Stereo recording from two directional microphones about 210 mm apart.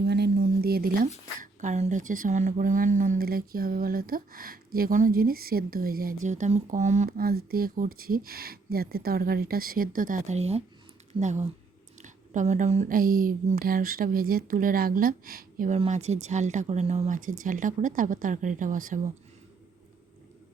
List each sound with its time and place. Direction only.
0.0 s a sound: 50° right (ahead or behind)
1.4 s a woman's voice: 35° right (ahead or behind)
11.1 s speech: 5° right (ahead or behind)
12.0 s a woman's voice: 35° right (ahead or behind)